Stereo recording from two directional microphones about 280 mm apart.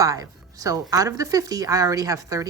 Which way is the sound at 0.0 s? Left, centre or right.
Centre.